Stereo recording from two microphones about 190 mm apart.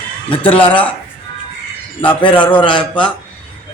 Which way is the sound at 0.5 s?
10° left (ahead or behind).